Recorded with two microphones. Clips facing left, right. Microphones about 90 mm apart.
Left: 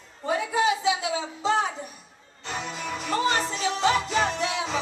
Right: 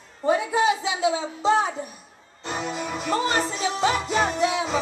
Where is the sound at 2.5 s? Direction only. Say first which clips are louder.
Right 3 dB; 15° right (ahead or behind).